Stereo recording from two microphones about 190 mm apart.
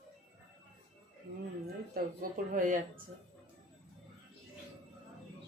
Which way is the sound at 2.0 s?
50° right (ahead or behind).